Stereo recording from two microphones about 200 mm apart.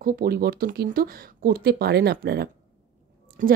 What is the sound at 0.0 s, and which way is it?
A woman's voice, 45° right (ahead or behind).